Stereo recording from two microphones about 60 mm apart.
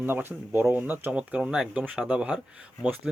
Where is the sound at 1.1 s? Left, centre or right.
Centre.